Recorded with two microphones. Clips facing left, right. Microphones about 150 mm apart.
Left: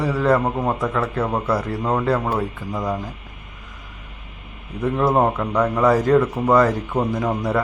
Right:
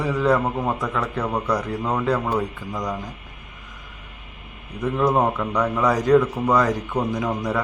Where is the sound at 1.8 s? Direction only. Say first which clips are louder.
Left 2 dB; 20° left (ahead or behind).